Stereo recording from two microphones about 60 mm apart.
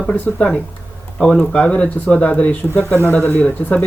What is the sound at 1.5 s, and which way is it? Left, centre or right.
Speech, centre.